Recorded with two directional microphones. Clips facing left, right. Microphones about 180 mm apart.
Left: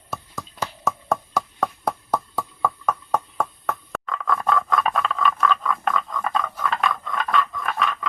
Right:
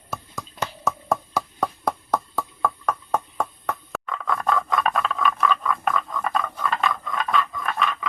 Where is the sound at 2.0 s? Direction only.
5° left (ahead or behind).